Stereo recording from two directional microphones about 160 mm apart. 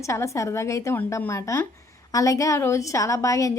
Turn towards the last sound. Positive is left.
turn(degrees=20)  # may be behind; listen again after turning